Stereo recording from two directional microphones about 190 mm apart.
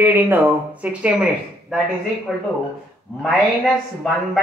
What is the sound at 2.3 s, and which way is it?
Speech, centre (ahead or behind).